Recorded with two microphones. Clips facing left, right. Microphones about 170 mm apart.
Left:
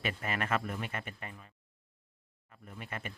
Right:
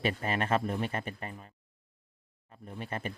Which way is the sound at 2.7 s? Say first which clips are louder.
Right 6 dB; 35° right (ahead or behind).